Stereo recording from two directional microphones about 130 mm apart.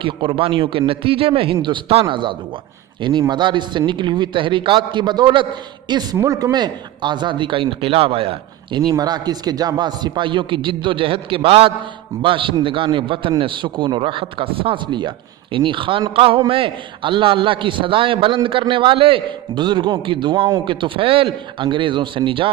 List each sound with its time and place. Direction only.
0.0 s a man's voice: 40° right (ahead or behind)
8.9 s a man's voice: 30° right (ahead or behind)